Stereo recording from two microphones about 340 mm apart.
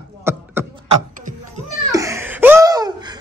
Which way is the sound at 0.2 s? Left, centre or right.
Centre.